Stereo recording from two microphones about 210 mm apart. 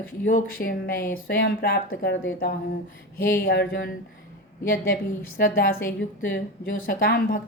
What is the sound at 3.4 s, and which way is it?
Speech, 50° left (ahead or behind).